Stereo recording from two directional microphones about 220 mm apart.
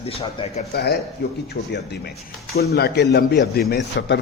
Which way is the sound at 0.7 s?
50° left (ahead or behind).